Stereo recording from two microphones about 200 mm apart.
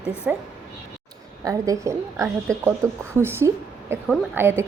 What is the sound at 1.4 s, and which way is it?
A woman's voice, 15° right (ahead or behind).